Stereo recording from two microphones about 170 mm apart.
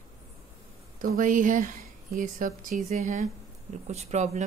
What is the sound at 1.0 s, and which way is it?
Speech, 50° right (ahead or behind).